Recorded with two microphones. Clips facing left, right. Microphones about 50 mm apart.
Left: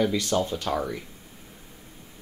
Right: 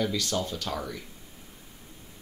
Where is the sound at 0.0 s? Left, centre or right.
Left.